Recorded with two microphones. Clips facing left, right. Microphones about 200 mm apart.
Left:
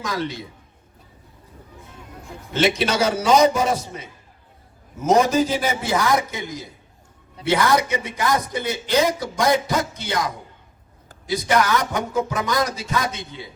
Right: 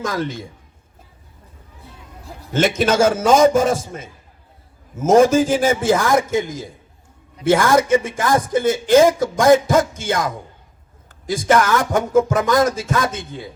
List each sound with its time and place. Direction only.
0.0 s speech: 50° right (ahead or behind)
1.8 s a sound: 35° right (ahead or behind)
2.5 s speech: 50° right (ahead or behind)